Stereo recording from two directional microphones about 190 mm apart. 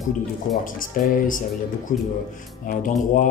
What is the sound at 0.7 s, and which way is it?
Speech, 45° left (ahead or behind).